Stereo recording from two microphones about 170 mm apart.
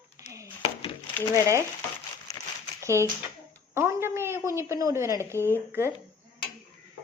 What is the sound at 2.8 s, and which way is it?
A woman's voice, 15° right (ahead or behind).